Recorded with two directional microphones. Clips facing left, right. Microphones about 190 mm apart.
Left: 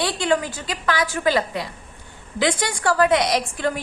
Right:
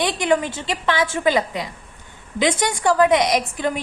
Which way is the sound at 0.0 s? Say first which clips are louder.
Right 2 dB; 20° right (ahead or behind).